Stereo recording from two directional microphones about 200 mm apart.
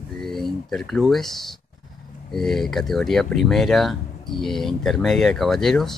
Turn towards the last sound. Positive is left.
turn(degrees=0)  # may be behind; listen again after turning